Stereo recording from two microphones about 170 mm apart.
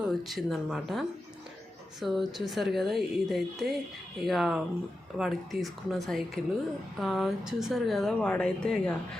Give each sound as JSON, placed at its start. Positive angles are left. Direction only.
{"t": 0.0, "sound": "speech", "side_deg": 0}